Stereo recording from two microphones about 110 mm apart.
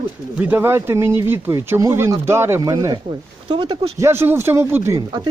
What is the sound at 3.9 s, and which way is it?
Speech, 25° right (ahead or behind).